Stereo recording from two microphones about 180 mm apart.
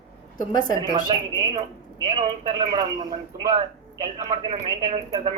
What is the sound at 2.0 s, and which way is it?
A man's voice, 30° right (ahead or behind).